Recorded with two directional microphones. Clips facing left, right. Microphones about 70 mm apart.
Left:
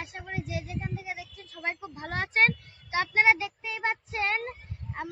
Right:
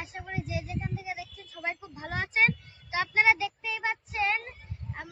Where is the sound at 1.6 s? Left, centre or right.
Left.